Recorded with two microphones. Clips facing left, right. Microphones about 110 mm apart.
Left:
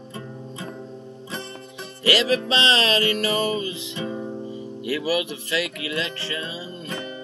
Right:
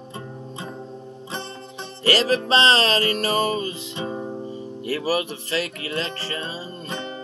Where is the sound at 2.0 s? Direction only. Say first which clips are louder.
Right 1 dB; 35° right (ahead or behind).